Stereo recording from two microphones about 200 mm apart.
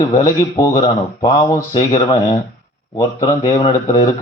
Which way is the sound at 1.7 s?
30° left (ahead or behind).